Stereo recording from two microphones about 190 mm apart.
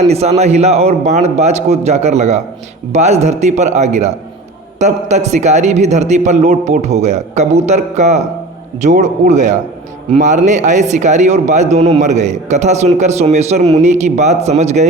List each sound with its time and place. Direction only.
0.1 s a man's voice: 35° right (ahead or behind)